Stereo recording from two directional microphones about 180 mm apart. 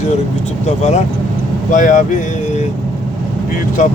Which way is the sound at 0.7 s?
40° left (ahead or behind).